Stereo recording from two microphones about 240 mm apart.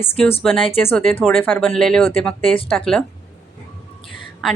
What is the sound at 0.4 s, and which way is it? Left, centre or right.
A woman's voice, centre.